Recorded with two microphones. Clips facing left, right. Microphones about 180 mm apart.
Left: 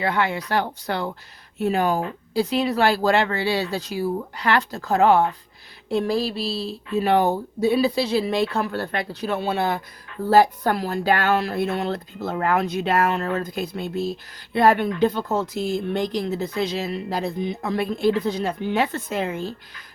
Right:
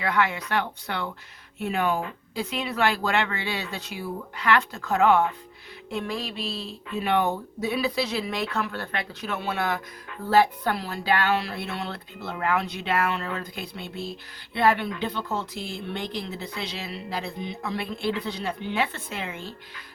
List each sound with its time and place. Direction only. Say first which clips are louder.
0.0 s speech: left 2 dB; 30° left (ahead or behind)